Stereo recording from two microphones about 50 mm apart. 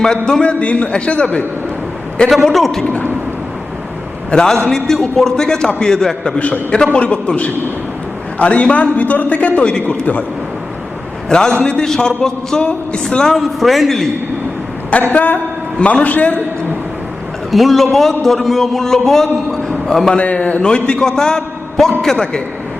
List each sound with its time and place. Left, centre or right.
0.3 s a man's voice: centre
0.6 s a man's voice: left
2.2 s a man's voice: centre
2.8 s a man's voice: left
4.3 s a man's voice: centre
6.2 s a man's voice: left
11.3 s a man's voice: centre
15.1 s a man's voice: left
15.8 s a man's voice: left
17.5 s a man's voice: centre
20.1 s a man's voice: left